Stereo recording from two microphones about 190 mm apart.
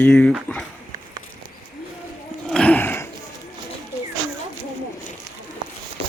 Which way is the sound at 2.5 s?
5° left (ahead or behind).